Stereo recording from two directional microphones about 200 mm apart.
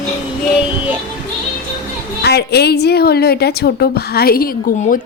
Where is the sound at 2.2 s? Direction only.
55° left (ahead or behind).